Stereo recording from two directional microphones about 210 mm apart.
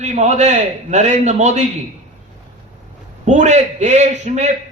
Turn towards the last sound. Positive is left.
turn(degrees=-35)  # may be behind; listen again after turning